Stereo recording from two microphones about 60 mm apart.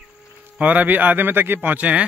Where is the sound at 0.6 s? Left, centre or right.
Right.